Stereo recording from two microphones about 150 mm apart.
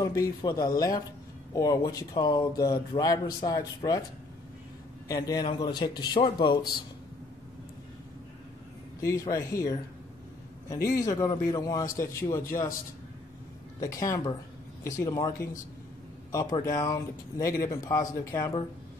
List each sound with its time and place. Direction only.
0.0 s speech: 25° left (ahead or behind)
5.0 s speech: 25° left (ahead or behind)
9.0 s speech: 20° left (ahead or behind)
11.0 s speech: 25° left (ahead or behind)
13.7 s speech: 20° left (ahead or behind)
16.5 s speech: 25° left (ahead or behind)